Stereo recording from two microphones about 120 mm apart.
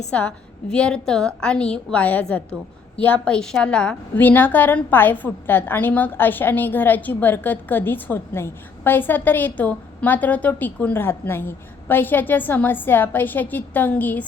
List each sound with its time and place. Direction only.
0.1 s a woman's voice: 10° left (ahead or behind)